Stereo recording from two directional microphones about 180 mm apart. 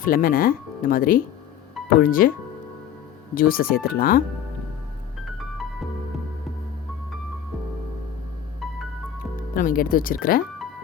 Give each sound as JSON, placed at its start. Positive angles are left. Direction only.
{"t": 0.0, "sound": "speech", "side_deg": 50}
{"t": 3.3, "sound": "speech", "side_deg": 55}
{"t": 9.6, "sound": "speech", "side_deg": 50}